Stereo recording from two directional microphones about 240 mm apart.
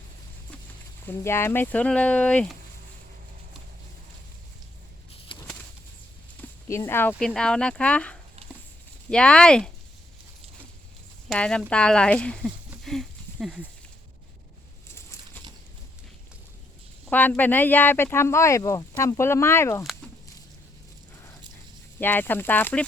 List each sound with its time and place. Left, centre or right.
1.0 s speech: centre
5.3 s a sound: centre
6.7 s speech: centre
11.3 s speech: centre
12.7 s a sound: centre
17.1 s speech: centre
22.0 s speech: centre